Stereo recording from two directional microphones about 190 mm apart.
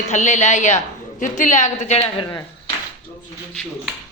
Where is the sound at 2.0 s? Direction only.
25° left (ahead or behind).